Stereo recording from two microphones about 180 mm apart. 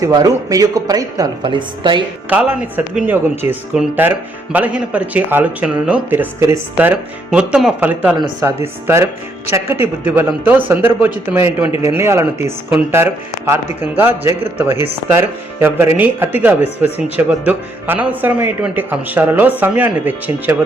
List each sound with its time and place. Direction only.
0.0 s speech: 20° right (ahead or behind)
2.3 s speech: 10° right (ahead or behind)